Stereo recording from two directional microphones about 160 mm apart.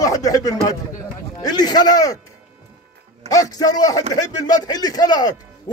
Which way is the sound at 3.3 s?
25° left (ahead or behind).